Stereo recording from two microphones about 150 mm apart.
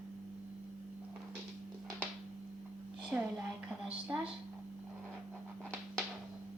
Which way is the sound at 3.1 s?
10° right (ahead or behind).